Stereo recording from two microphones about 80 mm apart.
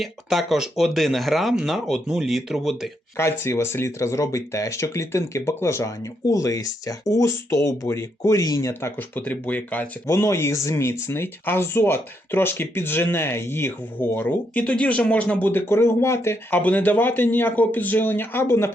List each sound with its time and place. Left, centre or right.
0.0 s speech: centre
3.2 s speech: left
6.2 s speech: left
9.0 s speech: left
10.1 s speech: left
16.6 s speech: centre